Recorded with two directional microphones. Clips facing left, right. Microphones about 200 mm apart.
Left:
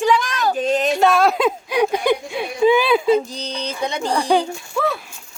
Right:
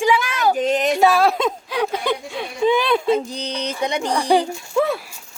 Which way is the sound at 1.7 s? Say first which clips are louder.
Left 4 dB; 15° left (ahead or behind).